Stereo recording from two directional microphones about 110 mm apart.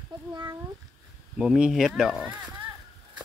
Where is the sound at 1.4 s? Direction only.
5° right (ahead or behind).